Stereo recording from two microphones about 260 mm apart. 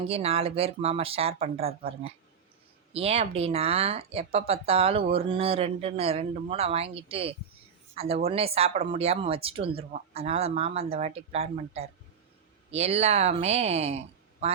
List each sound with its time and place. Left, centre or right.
0.0 s speech: right
2.9 s speech: right